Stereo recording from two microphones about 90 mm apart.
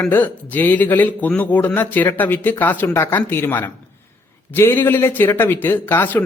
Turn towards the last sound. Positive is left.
turn(degrees=25)  # may be behind; listen again after turning